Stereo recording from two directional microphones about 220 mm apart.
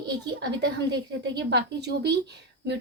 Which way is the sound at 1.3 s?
50° right (ahead or behind).